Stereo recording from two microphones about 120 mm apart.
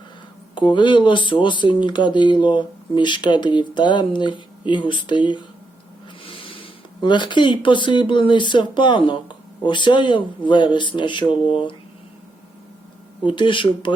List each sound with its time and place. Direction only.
0.5 s speech: 40° left (ahead or behind)
13.2 s speech: 40° left (ahead or behind)